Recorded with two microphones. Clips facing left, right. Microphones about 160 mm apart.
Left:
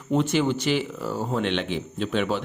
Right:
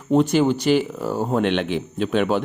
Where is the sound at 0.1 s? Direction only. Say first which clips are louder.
Right 5 dB; 40° right (ahead or behind).